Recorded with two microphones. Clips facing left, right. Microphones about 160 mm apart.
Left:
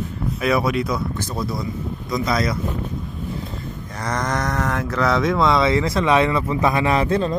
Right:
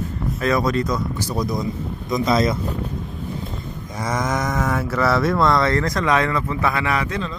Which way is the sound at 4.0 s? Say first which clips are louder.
Right 1 dB; 10° right (ahead or behind).